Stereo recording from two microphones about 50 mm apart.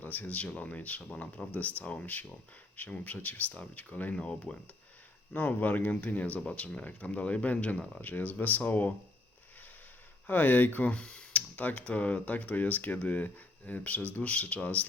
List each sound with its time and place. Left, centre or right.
0.0 s speech: left
4.1 s speech: left
5.3 s speech: left
10.2 s speech: left
10.9 s a sound: centre
11.5 s speech: left